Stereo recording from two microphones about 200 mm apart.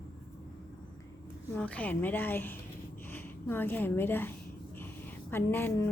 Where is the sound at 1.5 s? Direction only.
5° left (ahead or behind).